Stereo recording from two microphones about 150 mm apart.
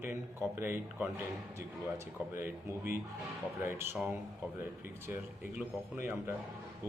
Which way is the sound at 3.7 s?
15° right (ahead or behind).